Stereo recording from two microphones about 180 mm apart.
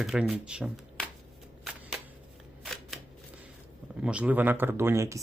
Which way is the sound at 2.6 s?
Centre (ahead or behind).